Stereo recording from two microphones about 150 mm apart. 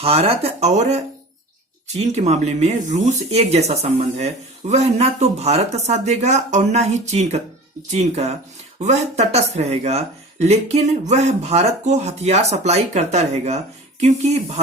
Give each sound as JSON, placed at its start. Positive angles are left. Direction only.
{"t": 0.0, "sound": "speech", "side_deg": -40}
{"t": 2.0, "sound": "speech", "side_deg": -45}